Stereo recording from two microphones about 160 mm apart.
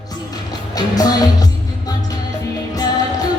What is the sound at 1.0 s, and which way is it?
Music, 25° left (ahead or behind).